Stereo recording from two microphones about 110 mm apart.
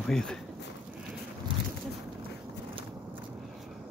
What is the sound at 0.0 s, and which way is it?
Speech, 5° left (ahead or behind).